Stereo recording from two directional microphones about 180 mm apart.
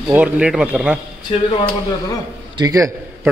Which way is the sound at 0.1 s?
5° right (ahead or behind).